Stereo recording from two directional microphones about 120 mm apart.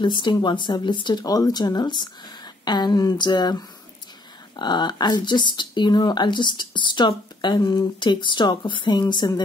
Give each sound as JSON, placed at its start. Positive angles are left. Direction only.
{"t": 0.0, "sound": "speech", "side_deg": 40}